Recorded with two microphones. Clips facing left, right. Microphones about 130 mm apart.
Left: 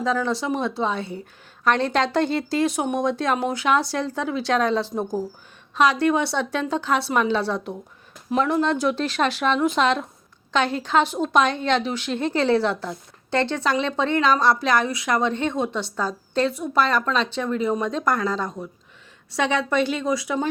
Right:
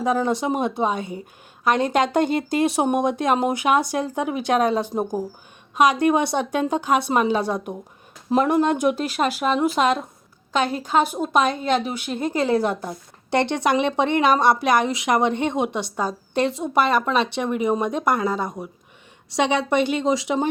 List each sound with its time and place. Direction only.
0.0 s a woman's voice: 20° right (ahead or behind)